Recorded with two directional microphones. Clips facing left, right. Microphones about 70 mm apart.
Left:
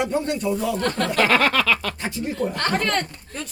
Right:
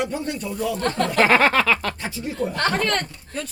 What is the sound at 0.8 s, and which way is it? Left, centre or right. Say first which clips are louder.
Speech: right 5 dB; right.